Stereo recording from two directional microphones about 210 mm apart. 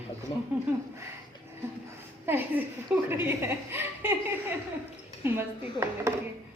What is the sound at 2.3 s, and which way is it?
A woman's voice, 10° right (ahead or behind).